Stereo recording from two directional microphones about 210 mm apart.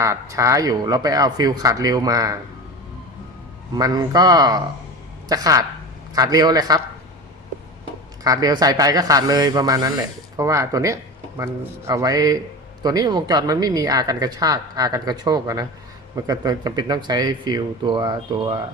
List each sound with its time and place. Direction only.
0.0 s speech: 15° right (ahead or behind)
3.8 s speech: 20° right (ahead or behind)
8.2 s speech: 15° right (ahead or behind)